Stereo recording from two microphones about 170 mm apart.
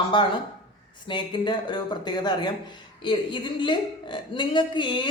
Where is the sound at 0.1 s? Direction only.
30° left (ahead or behind).